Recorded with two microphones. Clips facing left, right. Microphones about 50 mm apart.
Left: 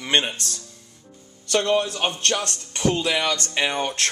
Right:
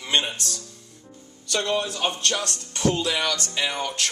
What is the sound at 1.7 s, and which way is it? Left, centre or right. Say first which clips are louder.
A man's voice: left 3 dB; left.